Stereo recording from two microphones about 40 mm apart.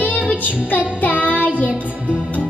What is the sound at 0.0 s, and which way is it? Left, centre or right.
Child singing, left.